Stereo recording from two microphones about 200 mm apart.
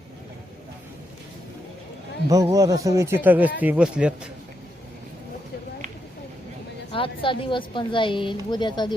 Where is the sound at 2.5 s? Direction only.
15° right (ahead or behind).